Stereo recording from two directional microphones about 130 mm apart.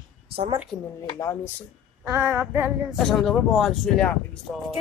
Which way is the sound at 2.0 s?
20° right (ahead or behind).